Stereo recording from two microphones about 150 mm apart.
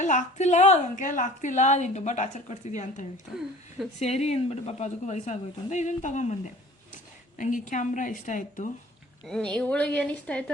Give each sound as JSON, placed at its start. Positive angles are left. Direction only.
{"t": 0.0, "sound": "a woman's voice", "side_deg": 55}
{"t": 9.2, "sound": "a woman's voice", "side_deg": 5}